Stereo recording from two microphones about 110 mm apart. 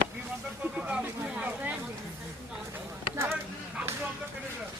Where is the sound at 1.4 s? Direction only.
15° right (ahead or behind).